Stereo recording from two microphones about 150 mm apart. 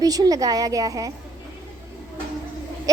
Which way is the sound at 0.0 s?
25° right (ahead or behind).